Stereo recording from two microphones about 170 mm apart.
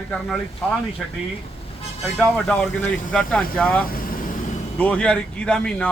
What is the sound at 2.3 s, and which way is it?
Speech, 5° left (ahead or behind).